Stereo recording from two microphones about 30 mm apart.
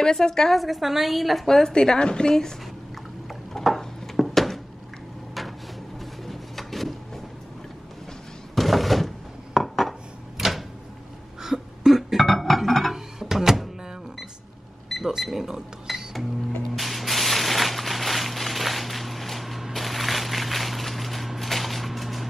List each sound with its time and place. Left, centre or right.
0.0 s a woman's voice: centre
0.5 s a woman's voice: centre
1.5 s a woman's voice: left
3.6 s a sound: centre
6.2 s a sound: centre
8.5 s thunk: centre
10.3 s a sound: centre
12.2 s music: centre
12.9 s music: centre
14.9 s cash register: centre
15.3 s chink: centre
16.7 s spray: centre
19.7 s a sound: centre